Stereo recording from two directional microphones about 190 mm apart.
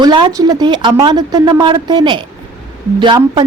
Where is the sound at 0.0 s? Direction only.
25° right (ahead or behind).